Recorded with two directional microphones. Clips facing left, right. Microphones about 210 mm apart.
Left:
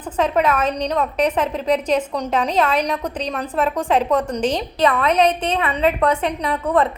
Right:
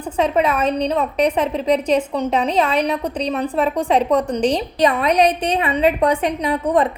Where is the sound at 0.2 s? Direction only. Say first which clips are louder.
Right 1 dB; 10° right (ahead or behind).